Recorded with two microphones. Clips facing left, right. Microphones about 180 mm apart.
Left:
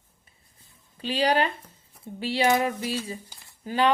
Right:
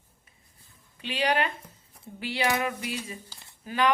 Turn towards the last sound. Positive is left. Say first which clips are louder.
# left 2 dB
turn(degrees=30)  # may be behind; listen again after turning